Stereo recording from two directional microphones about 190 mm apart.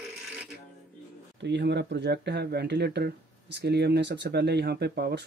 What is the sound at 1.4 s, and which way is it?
Speech, 65° right (ahead or behind).